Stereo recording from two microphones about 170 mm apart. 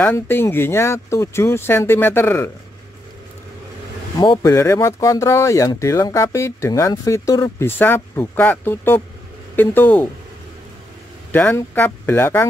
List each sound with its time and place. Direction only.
0.0 s speech: 15° left (ahead or behind)
4.2 s speech: 20° left (ahead or behind)
11.3 s speech: 10° left (ahead or behind)